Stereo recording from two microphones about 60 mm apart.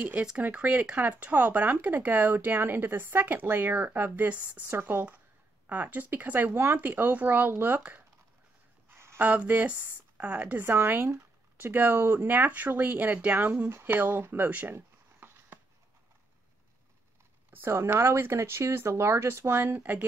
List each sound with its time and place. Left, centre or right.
0.0 s speech: centre
8.9 s a sound: right
9.2 s speech: right
10.6 s speech: right
14.2 s a sound: right
17.6 s speech: right